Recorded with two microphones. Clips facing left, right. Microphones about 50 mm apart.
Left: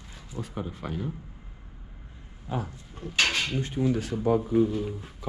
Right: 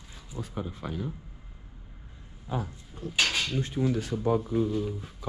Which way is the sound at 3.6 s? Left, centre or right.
Left.